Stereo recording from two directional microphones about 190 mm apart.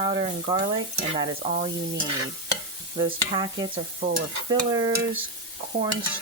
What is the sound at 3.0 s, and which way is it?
Stir, 20° right (ahead or behind).